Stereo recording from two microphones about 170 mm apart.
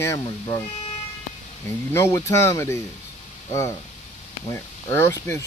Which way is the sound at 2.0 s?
15° left (ahead or behind).